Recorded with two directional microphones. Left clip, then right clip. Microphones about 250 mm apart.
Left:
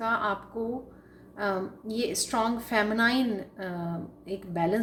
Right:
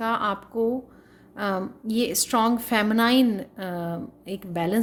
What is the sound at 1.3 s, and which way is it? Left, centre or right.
A woman's voice, right.